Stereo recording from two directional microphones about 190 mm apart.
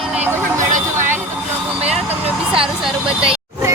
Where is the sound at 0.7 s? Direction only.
40° right (ahead or behind).